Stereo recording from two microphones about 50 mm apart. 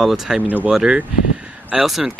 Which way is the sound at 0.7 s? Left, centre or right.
Centre.